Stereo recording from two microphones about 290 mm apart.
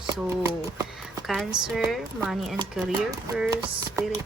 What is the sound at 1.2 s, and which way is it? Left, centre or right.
A woman's voice, centre.